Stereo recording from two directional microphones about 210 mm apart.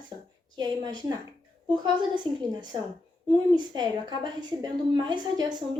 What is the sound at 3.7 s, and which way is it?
A woman's voice, 20° right (ahead or behind).